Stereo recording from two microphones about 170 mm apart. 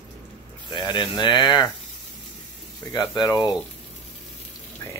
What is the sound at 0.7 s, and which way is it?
Speech, 25° left (ahead or behind).